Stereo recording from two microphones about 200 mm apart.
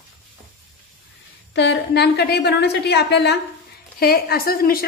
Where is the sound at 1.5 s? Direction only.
60° left (ahead or behind).